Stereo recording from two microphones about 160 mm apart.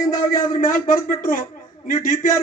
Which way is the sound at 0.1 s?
60° left (ahead or behind).